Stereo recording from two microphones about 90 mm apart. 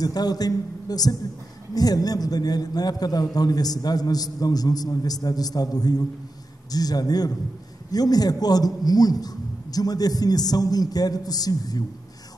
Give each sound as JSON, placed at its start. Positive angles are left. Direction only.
{"t": 0.0, "sound": "a man's voice", "side_deg": 45}